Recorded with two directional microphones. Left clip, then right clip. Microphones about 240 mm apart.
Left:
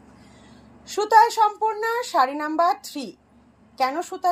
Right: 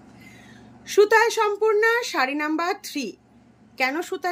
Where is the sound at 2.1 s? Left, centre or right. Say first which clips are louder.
Left 3 dB; right.